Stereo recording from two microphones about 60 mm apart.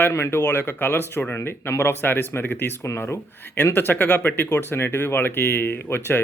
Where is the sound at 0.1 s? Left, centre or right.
Left.